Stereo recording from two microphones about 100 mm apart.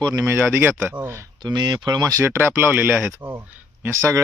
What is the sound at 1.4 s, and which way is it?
Speech, 45° right (ahead or behind).